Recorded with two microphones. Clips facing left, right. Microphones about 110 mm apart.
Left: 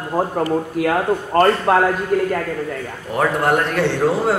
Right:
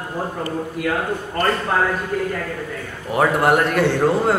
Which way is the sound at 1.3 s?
65° left (ahead or behind).